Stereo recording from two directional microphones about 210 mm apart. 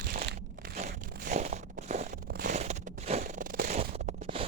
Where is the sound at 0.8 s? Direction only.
35° right (ahead or behind).